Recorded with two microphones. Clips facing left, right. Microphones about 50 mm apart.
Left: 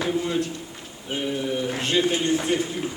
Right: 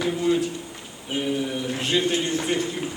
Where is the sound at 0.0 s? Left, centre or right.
Centre.